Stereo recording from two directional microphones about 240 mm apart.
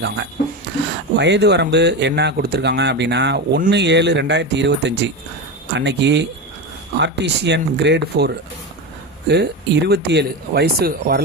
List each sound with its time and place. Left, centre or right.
1.2 s speech: right